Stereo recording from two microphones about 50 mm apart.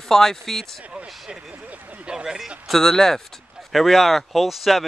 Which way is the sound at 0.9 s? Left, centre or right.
Right.